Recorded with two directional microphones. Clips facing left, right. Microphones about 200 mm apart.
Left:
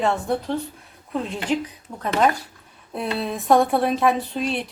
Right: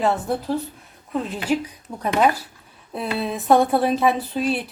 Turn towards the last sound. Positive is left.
turn(degrees=-5)  # may be behind; listen again after turning